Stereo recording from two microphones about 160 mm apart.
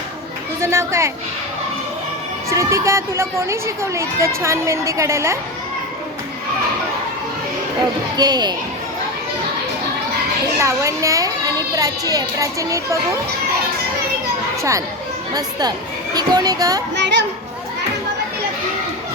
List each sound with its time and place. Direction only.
0.6 s speech: 15° right (ahead or behind)
2.5 s speech: 20° right (ahead or behind)
8.1 s a child's voice: 25° right (ahead or behind)
10.6 s a child's voice: 20° right (ahead or behind)
15.3 s a child's voice: 25° right (ahead or behind)
16.9 s speech: 90° right